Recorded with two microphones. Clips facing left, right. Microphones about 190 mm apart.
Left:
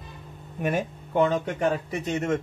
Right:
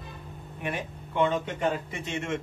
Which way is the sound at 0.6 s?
45° left (ahead or behind).